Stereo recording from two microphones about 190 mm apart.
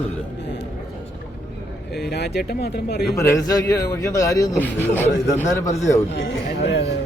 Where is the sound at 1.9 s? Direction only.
60° left (ahead or behind).